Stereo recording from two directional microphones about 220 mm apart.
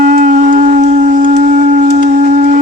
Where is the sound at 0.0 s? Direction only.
35° right (ahead or behind).